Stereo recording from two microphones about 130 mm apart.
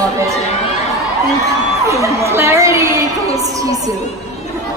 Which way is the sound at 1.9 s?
20° right (ahead or behind).